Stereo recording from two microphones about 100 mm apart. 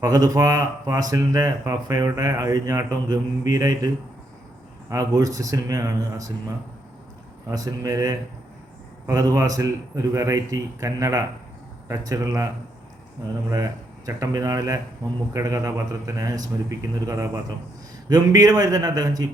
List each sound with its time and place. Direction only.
0.0 s speech: 35° right (ahead or behind)
7.5 s speech: 35° right (ahead or behind)
13.5 s speech: 35° right (ahead or behind)